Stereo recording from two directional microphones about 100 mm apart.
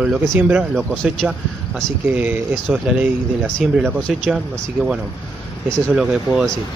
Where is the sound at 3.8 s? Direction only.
10° left (ahead or behind).